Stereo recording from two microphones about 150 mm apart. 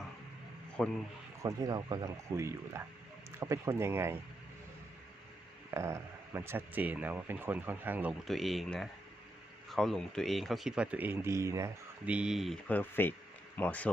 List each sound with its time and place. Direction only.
0.8 s speech: centre (ahead or behind)
1.4 s speech: 25° right (ahead or behind)
5.7 s speech: 15° right (ahead or behind)
8.2 s speech: centre (ahead or behind); by 11.7 s 20° right (ahead or behind)
12.0 s speech: 5° right (ahead or behind)
12.6 s speech: 10° left (ahead or behind)